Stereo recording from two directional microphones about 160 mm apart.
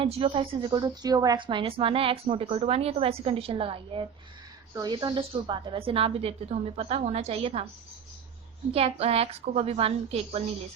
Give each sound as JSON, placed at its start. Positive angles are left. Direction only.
{"t": 0.0, "sound": "a woman's voice", "side_deg": -40}
{"t": 8.7, "sound": "a woman's voice", "side_deg": -40}